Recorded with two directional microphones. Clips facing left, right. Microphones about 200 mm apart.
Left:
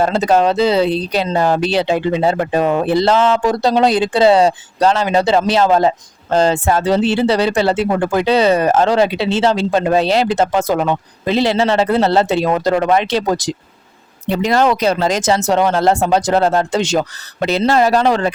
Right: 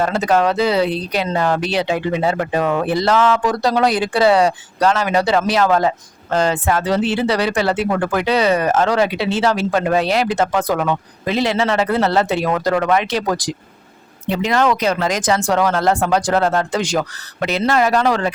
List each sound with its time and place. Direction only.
0.0 s speech: 30° left (ahead or behind)
14.3 s speech: 40° left (ahead or behind)